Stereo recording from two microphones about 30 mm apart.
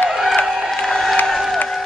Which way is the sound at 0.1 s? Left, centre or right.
Centre.